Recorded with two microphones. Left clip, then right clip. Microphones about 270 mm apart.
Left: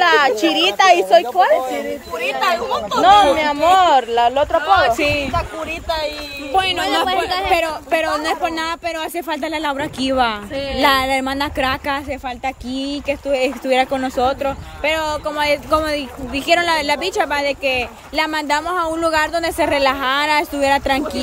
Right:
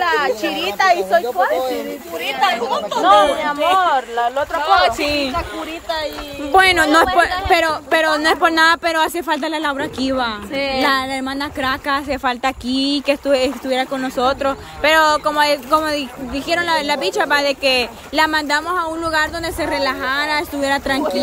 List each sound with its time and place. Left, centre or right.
0.0 s speech: left
3.0 s speech: left
4.6 s speech: right
6.5 s speech: centre